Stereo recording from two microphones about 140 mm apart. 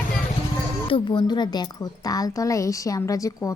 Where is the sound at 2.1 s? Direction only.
25° left (ahead or behind).